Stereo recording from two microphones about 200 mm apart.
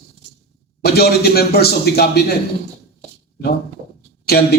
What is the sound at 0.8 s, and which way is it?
A man's voice, 50° left (ahead or behind).